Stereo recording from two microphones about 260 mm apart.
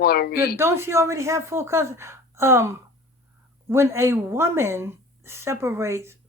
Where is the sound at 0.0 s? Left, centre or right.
Left.